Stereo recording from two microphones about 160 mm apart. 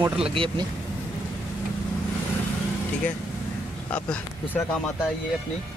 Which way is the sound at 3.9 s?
10° left (ahead or behind).